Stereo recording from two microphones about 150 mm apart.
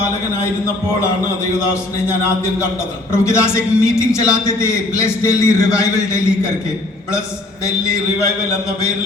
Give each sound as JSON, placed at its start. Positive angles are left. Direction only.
{"t": 3.1, "sound": "a woman's voice", "side_deg": 15}